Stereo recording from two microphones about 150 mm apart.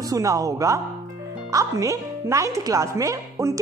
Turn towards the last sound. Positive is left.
turn(degrees=-20)  # may be behind; listen again after turning